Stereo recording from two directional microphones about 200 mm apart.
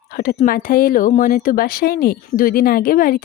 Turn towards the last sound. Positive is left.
turn(degrees=45)  # may be behind; listen again after turning